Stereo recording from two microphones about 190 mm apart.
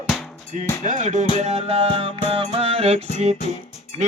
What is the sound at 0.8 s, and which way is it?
Music, 40° right (ahead or behind).